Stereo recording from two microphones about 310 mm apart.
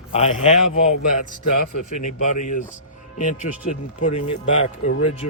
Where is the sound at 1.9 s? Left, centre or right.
Left.